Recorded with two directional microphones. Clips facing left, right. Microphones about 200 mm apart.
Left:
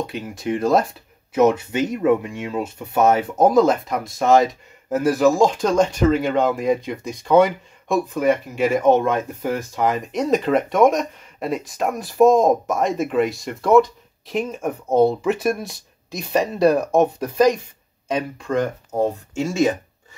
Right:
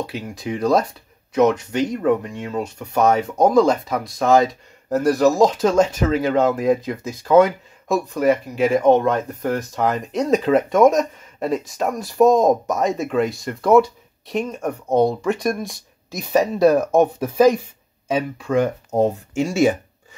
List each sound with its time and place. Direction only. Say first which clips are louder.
0.0 s speech: left 1 dB; centre (ahead or behind)
18.9 s speech: right 3 dB; 20° right (ahead or behind)